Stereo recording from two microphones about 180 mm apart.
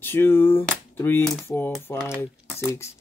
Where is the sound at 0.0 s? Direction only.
10° left (ahead or behind).